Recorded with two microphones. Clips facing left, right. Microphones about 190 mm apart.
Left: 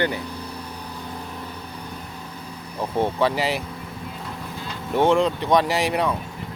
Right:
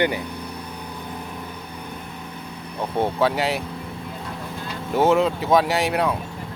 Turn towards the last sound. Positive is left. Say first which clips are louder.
# right 1 dB
turn(degrees=0)  # may be behind; listen again after turning